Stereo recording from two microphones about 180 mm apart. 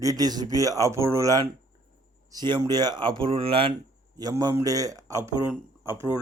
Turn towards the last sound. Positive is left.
turn(degrees=-10)  # may be behind; listen again after turning